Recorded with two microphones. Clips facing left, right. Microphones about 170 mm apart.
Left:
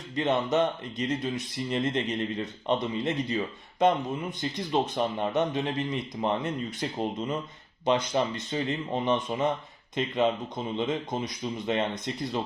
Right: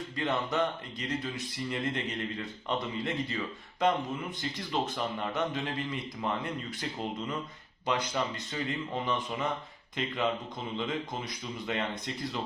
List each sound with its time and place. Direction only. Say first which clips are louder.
0.2 s speech: left 5 dB; 20° left (ahead or behind)
10.8 s speech: left 5 dB; 20° left (ahead or behind)